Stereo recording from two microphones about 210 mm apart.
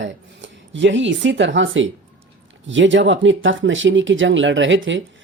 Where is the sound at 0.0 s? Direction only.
60° right (ahead or behind).